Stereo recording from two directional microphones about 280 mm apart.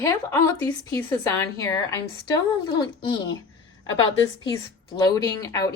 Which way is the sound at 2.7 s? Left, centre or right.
Centre.